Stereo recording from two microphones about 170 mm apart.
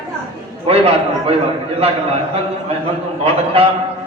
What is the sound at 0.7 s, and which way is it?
Speech, 35° right (ahead or behind).